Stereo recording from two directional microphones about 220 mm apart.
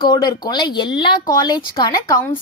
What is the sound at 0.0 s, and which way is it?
Speech, 20° left (ahead or behind).